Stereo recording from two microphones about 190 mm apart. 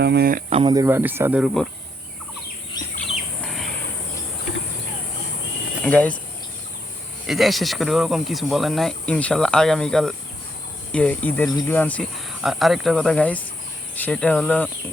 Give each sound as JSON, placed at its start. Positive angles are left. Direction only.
{"t": 0.0, "sound": "speech", "side_deg": -55}
{"t": 0.5, "sound": "speech", "side_deg": -25}
{"t": 2.8, "sound": "bird", "side_deg": 20}
{"t": 3.4, "sound": "a sound", "side_deg": 0}
{"t": 5.8, "sound": "speech", "side_deg": 5}
{"t": 7.3, "sound": "speech", "side_deg": 0}